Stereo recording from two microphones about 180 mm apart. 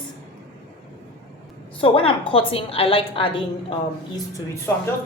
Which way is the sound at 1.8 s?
30° left (ahead or behind).